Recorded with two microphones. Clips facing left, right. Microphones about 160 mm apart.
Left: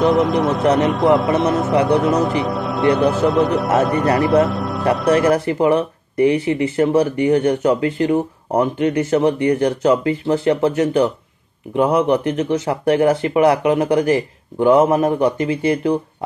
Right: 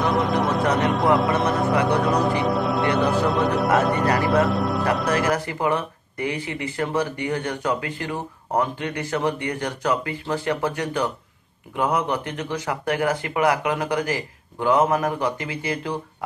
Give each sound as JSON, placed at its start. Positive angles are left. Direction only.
{"t": 0.1, "sound": "speech", "side_deg": 0}
{"t": 5.1, "sound": "speech", "side_deg": 25}